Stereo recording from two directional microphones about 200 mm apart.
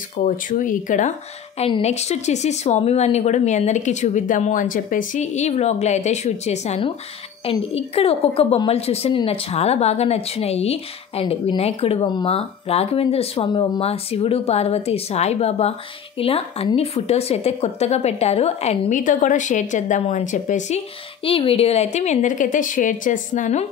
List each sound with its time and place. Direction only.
0.2 s a woman's voice: 40° left (ahead or behind)